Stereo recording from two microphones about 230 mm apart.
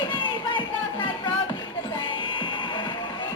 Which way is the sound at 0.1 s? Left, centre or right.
Left.